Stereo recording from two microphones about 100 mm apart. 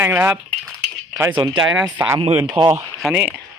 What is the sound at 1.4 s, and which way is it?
Speech, 50° right (ahead or behind).